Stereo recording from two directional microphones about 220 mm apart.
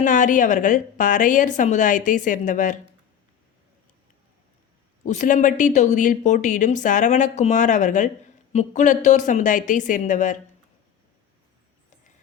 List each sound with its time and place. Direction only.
0.0 s a woman's voice: 35° left (ahead or behind)
5.0 s a woman's voice: 35° left (ahead or behind)